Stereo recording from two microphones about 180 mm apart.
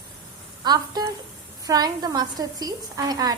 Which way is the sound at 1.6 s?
20° right (ahead or behind).